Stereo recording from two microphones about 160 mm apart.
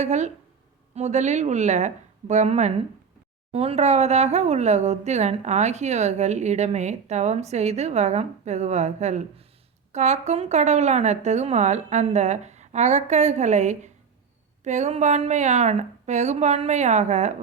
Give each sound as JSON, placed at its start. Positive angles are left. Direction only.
{"t": 0.0, "sound": "speech", "side_deg": -45}